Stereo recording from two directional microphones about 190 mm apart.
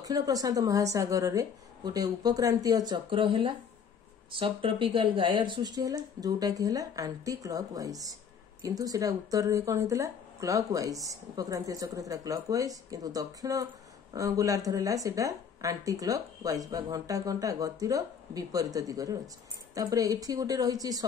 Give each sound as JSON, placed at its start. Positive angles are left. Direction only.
{"t": 0.0, "sound": "speech", "side_deg": -20}